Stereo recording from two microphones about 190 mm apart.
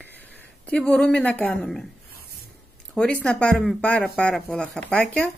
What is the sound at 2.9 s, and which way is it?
A woman's voice, 5° left (ahead or behind).